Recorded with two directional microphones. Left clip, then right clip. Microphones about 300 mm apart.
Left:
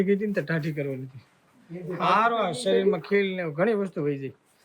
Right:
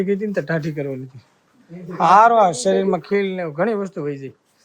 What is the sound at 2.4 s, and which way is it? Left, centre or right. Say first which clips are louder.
Speech: right 6 dB; centre.